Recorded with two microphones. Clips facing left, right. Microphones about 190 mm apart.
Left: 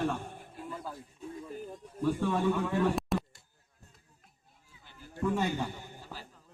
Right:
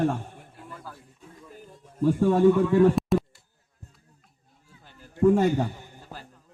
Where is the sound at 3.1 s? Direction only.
Centre (ahead or behind).